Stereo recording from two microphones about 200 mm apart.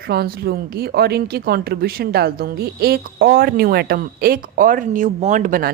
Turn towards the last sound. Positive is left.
turn(degrees=-45)  # may be behind; listen again after turning